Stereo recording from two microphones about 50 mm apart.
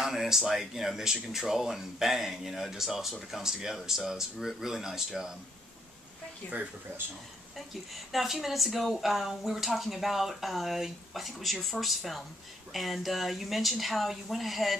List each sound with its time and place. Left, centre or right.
0.0 s speech: centre
6.4 s speech: left
7.5 s speech: centre